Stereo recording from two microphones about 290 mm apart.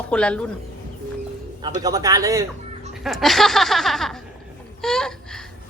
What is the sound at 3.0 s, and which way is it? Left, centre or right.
Speech, centre.